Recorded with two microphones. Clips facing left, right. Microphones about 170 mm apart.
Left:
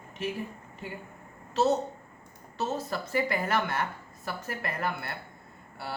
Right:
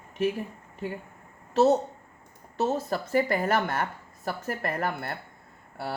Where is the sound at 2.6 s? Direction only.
50° right (ahead or behind).